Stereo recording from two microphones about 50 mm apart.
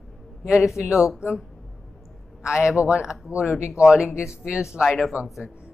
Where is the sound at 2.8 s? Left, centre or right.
Centre.